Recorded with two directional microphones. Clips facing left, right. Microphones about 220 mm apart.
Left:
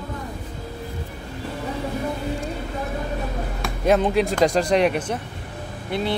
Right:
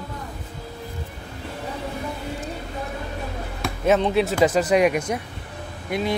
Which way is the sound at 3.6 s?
Centre (ahead or behind).